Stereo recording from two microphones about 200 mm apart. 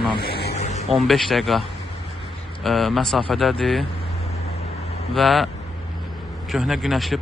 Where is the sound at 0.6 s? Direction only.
35° left (ahead or behind).